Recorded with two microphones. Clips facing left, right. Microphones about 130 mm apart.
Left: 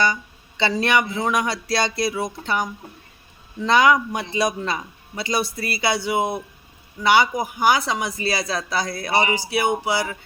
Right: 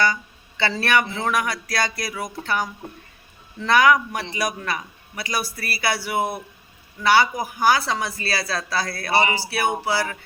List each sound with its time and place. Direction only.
0.0 s speech: 20° left (ahead or behind)